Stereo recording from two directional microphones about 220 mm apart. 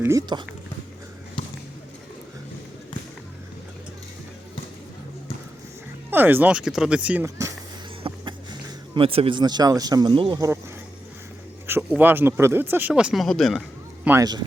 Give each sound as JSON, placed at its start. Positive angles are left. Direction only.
{"t": 0.0, "sound": "speech", "side_deg": -15}
{"t": 6.1, "sound": "speech", "side_deg": -10}
{"t": 11.6, "sound": "speech", "side_deg": -10}